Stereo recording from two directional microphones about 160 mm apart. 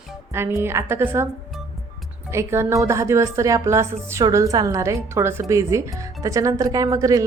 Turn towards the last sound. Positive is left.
turn(degrees=-20)  # may be behind; listen again after turning